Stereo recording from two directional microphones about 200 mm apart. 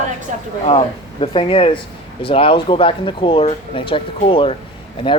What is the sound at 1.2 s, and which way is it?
A man's voice, 25° left (ahead or behind).